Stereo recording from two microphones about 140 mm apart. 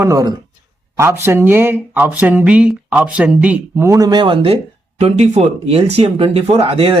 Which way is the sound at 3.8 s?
25° right (ahead or behind).